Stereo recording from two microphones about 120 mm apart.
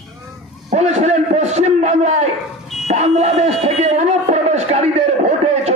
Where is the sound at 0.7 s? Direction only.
70° right (ahead or behind).